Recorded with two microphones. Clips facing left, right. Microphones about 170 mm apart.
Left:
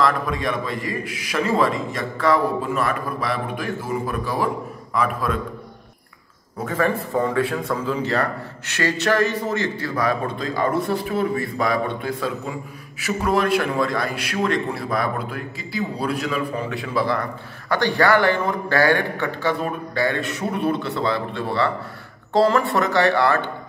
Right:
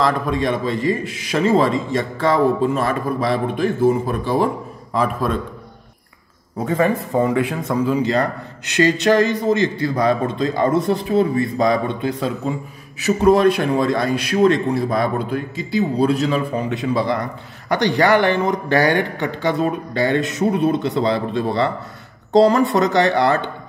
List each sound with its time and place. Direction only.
0.0 s speech: 25° right (ahead or behind)
6.6 s speech: 20° right (ahead or behind)